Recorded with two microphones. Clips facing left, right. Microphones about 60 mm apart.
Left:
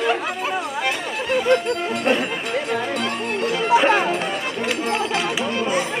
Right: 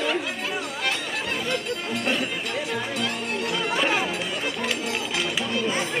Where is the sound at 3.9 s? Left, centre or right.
Left.